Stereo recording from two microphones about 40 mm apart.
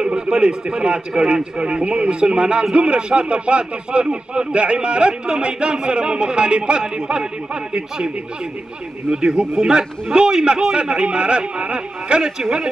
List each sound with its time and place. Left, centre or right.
0.0 s speech: right
9.1 s a man's voice: centre